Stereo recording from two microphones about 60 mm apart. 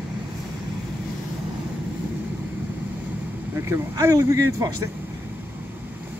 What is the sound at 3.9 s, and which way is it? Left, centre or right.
Speech, right.